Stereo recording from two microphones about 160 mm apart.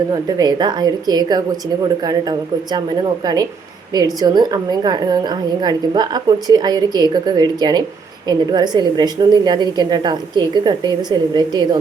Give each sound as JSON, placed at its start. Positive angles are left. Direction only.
{"t": 0.1, "sound": "a woman's voice", "side_deg": -25}
{"t": 2.7, "sound": "a woman's voice", "side_deg": -25}